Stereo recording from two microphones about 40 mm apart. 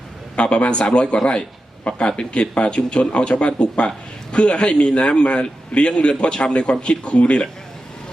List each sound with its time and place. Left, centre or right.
0.3 s speech: left